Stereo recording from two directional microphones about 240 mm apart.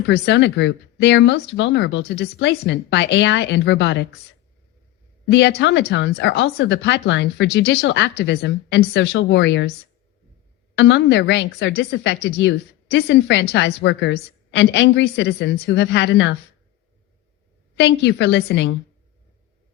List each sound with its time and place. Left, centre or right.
0.1 s a woman's voice: left
5.2 s a woman's voice: left
10.8 s a woman's voice: left
17.7 s a woman's voice: left